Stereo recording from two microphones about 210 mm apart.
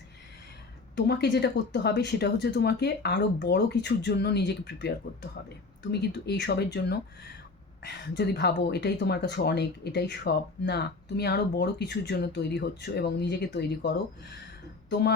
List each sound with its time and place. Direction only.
0.9 s speech: 50° left (ahead or behind)
5.9 s speech: 50° left (ahead or behind)